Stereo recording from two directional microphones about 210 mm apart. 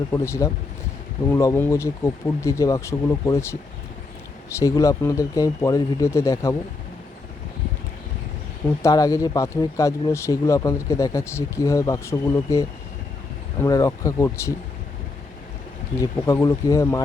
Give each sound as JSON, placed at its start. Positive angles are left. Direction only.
{"t": 0.1, "sound": "speech", "side_deg": 15}
{"t": 8.8, "sound": "speech", "side_deg": 15}
{"t": 16.0, "sound": "speech", "side_deg": 15}